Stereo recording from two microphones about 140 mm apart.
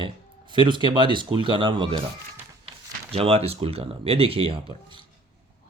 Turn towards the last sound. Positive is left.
turn(degrees=-40)  # may be behind; listen again after turning